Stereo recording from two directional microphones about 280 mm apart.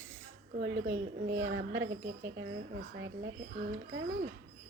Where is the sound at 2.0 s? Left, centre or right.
Right.